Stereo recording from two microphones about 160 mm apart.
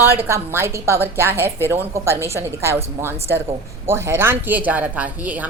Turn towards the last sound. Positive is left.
turn(degrees=-10)  # may be behind; listen again after turning